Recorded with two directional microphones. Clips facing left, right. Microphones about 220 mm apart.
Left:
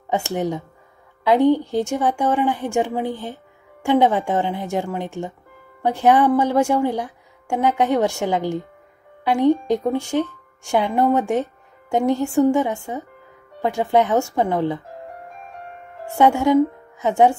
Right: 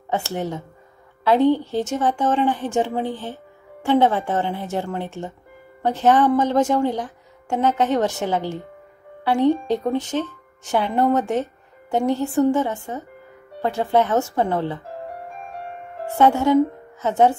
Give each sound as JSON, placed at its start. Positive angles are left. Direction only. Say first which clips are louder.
{"t": 0.1, "sound": "a woman's voice", "louder": "left 3 dB", "side_deg": 15}
{"t": 16.2, "sound": "a woman's voice", "louder": "left 1 dB", "side_deg": 15}